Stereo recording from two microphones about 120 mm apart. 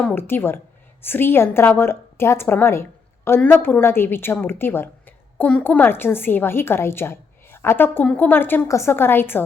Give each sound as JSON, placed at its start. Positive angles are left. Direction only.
{"t": 0.0, "sound": "a woman's voice", "side_deg": 15}